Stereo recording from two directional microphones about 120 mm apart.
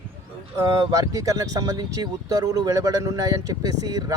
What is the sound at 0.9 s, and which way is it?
Speech, 30° right (ahead or behind).